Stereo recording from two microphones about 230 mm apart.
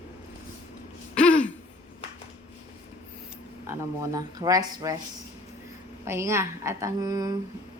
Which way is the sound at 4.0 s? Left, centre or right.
Centre.